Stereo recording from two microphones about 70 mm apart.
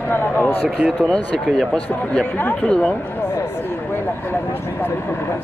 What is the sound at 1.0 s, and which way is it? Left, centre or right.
Speech, centre.